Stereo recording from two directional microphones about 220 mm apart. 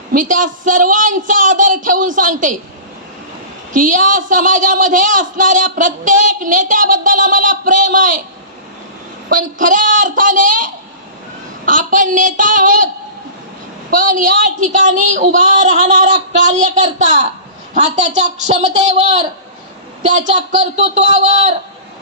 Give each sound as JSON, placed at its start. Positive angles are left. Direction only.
{"t": 0.1, "sound": "a woman's voice", "side_deg": -35}
{"t": 3.7, "sound": "a woman's voice", "side_deg": -35}
{"t": 9.3, "sound": "a woman's voice", "side_deg": -35}
{"t": 13.9, "sound": "a woman's voice", "side_deg": -35}